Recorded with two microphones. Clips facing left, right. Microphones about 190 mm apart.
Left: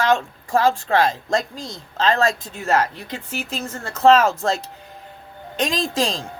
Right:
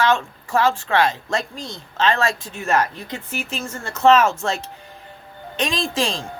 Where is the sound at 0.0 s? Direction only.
35° left (ahead or behind).